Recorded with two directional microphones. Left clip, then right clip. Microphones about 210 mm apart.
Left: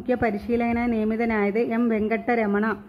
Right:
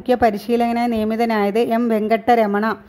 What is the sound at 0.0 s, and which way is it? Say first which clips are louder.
A woman's voice: right 8 dB; 40° right (ahead or behind).